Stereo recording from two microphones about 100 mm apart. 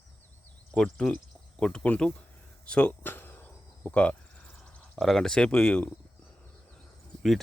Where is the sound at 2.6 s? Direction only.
10° left (ahead or behind).